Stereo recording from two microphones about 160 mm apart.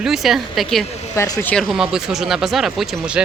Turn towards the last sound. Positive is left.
turn(degrees=-5)  # may be behind; listen again after turning